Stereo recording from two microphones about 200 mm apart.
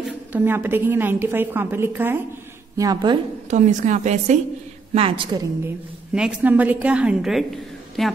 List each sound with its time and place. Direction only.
0.3 s a woman's voice: 10° right (ahead or behind)
3.4 s a woman's voice: 35° right (ahead or behind)
4.9 s a woman's voice: 25° right (ahead or behind)
6.1 s a woman's voice: 5° right (ahead or behind)